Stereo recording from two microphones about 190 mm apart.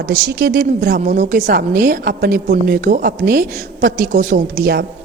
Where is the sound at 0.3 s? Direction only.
55° right (ahead or behind).